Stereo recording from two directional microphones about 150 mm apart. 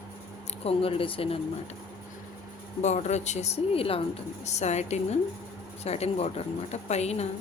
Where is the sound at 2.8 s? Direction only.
50° left (ahead or behind).